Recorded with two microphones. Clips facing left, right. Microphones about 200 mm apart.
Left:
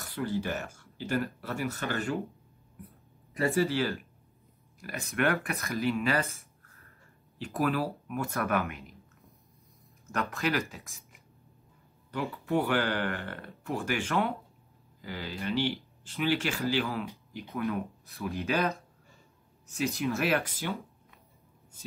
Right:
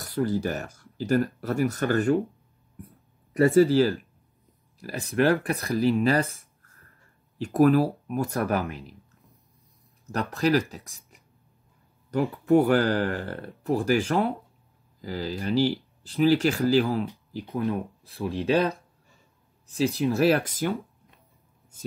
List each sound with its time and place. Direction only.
0.0 s speech: 40° right (ahead or behind)
3.3 s speech: 45° right (ahead or behind)
7.3 s speech: 45° right (ahead or behind)
10.0 s speech: 35° right (ahead or behind)
12.1 s speech: 40° right (ahead or behind)